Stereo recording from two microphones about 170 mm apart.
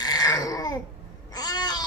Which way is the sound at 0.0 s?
25° left (ahead or behind).